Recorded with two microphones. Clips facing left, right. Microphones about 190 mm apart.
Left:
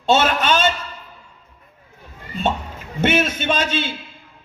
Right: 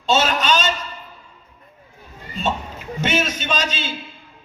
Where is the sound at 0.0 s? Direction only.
55° left (ahead or behind).